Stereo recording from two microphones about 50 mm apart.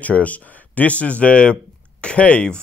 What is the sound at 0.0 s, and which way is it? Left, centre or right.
Speech, left.